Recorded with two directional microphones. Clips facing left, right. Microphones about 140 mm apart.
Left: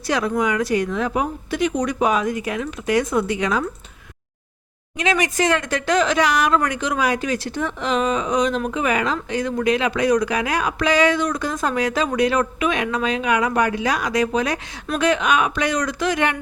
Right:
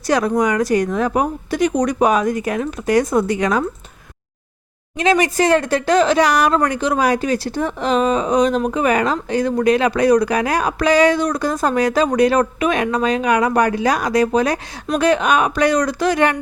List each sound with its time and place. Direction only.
0.1 s speech: 40° right (ahead or behind)
4.9 s speech: 35° right (ahead or behind)